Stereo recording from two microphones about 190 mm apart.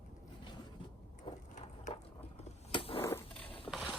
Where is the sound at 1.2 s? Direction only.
40° left (ahead or behind).